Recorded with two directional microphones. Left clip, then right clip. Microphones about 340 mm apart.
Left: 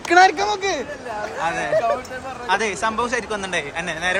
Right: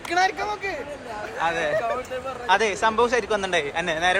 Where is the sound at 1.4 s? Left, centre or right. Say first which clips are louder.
Left 3 dB; centre.